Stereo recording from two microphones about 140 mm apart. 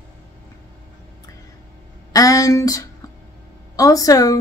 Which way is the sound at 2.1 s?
25° left (ahead or behind).